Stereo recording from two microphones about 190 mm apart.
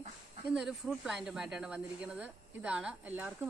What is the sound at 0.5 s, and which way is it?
Speech, centre (ahead or behind).